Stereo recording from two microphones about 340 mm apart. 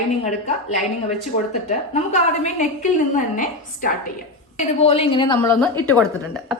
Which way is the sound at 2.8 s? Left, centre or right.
Left.